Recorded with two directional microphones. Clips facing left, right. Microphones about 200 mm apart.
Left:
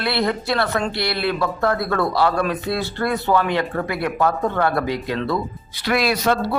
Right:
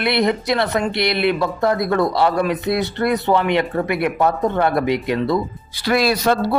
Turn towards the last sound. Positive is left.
turn(degrees=-35)  # may be behind; listen again after turning